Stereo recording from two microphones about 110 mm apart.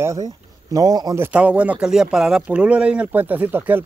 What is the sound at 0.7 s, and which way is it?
Speech, 35° right (ahead or behind).